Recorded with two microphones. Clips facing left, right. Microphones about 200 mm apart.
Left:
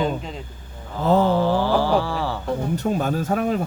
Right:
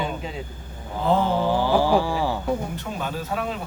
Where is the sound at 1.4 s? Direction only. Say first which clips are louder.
Left 1 dB; 15° right (ahead or behind).